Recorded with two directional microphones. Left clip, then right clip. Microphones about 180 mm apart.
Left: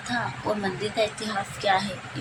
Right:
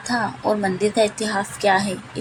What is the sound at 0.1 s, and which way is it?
A woman's voice, 25° right (ahead or behind).